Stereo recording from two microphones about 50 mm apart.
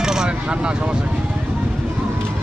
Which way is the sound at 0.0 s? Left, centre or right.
Centre.